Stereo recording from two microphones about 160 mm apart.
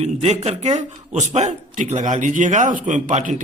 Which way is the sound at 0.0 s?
40° right (ahead or behind).